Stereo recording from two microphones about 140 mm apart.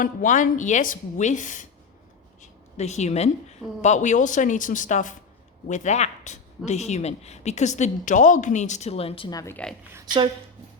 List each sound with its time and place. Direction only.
0.0 s speech: 70° left (ahead or behind)
2.4 s speech: 50° left (ahead or behind)
9.3 s speech: 25° left (ahead or behind)